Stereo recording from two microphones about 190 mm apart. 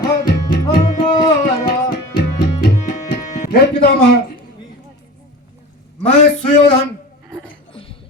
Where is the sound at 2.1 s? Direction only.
20° left (ahead or behind).